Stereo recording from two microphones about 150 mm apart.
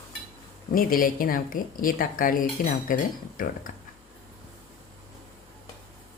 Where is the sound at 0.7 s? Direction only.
70° left (ahead or behind).